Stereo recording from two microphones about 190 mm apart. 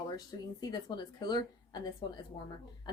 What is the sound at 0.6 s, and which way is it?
A woman's voice, 20° left (ahead or behind).